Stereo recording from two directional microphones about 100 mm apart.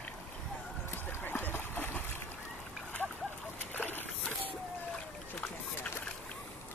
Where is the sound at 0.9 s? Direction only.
20° left (ahead or behind).